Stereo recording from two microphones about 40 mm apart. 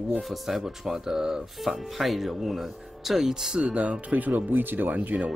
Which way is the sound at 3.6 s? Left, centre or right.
Right.